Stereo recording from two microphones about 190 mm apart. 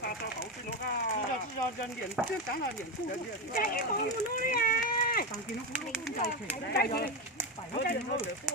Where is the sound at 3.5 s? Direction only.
50° left (ahead or behind).